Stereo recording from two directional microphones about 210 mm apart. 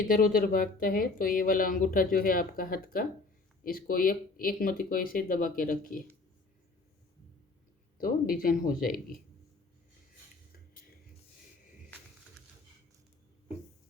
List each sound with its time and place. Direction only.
0.1 s speech: 45° left (ahead or behind)
7.9 s speech: 40° left (ahead or behind)